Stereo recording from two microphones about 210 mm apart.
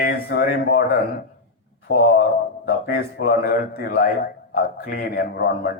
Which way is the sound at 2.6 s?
50° left (ahead or behind).